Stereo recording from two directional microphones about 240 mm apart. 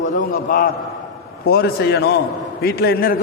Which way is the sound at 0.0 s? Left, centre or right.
Left.